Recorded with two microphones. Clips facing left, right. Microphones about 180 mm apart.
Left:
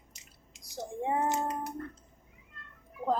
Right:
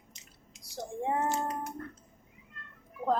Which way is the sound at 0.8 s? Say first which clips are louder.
Even; 15° left (ahead or behind).